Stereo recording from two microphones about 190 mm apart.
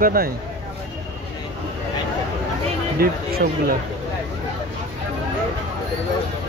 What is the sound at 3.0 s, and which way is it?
Speech, 55° right (ahead or behind).